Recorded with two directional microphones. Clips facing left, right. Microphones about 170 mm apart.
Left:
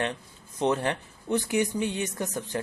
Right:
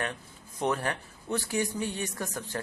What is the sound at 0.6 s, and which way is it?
Speech, 20° left (ahead or behind).